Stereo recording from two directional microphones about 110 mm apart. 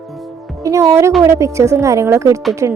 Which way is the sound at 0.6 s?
25° right (ahead or behind).